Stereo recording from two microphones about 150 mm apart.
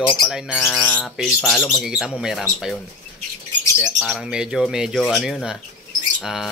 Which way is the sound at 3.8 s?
5° right (ahead or behind).